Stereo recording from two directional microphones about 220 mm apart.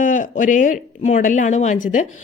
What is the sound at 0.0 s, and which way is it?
Speech, 35° left (ahead or behind).